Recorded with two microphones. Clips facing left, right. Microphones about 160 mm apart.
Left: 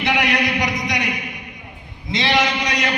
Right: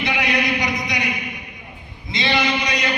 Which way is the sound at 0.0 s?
85° left.